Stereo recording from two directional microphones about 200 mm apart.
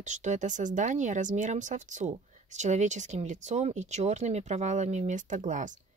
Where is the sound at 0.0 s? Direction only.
35° right (ahead or behind).